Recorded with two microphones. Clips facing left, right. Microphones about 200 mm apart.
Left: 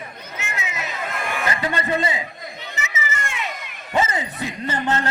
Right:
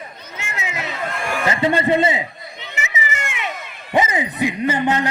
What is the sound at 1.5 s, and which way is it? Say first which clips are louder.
Music: right 7 dB; 25° right (ahead or behind).